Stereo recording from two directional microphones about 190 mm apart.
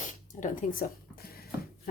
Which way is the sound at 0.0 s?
45° left (ahead or behind).